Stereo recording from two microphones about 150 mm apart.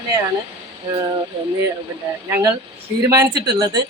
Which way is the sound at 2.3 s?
25° right (ahead or behind).